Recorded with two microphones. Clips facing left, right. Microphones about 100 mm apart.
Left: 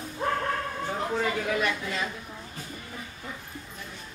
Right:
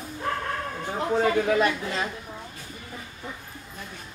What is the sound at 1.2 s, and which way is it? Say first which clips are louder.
Speech: right 8 dB; 35° right (ahead or behind).